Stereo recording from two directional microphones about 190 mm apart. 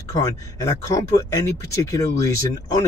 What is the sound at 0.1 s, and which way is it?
Speech, 15° left (ahead or behind).